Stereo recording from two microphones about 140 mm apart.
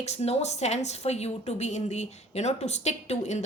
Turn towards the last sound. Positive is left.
turn(degrees=55)  # may be behind; listen again after turning